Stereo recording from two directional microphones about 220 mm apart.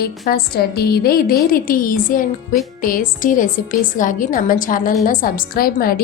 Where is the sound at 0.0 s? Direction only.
45° left (ahead or behind).